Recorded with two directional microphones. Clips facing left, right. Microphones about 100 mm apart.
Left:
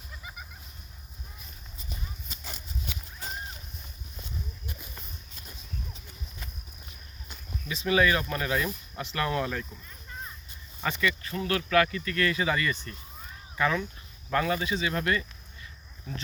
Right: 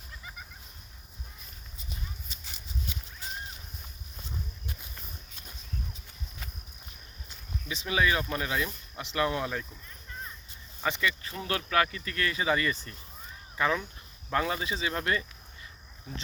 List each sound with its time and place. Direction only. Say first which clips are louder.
2.3 s horse: left 5 dB; 45° left (ahead or behind)
2.9 s a sound: left 2 dB; 70° left (ahead or behind)
7.7 s speech: left 3 dB; 20° right (ahead or behind)
10.8 s speech: left 1 dB; 25° right (ahead or behind)